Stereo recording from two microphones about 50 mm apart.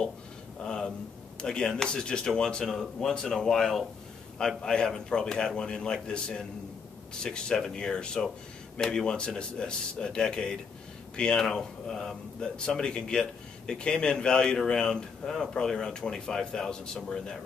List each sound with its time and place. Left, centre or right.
0.7 s speech: centre